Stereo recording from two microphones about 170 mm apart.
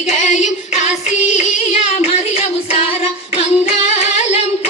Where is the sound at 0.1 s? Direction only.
45° left (ahead or behind).